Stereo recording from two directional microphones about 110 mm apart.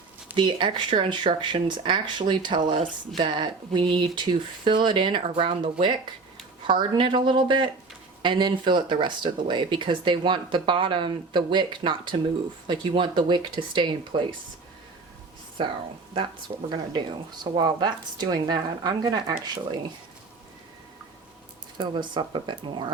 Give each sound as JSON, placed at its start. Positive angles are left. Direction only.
{"t": 0.3, "sound": "speech", "side_deg": -45}
{"t": 15.6, "sound": "a woman's voice", "side_deg": -50}
{"t": 16.9, "sound": "speech", "side_deg": -45}
{"t": 21.8, "sound": "speech", "side_deg": -45}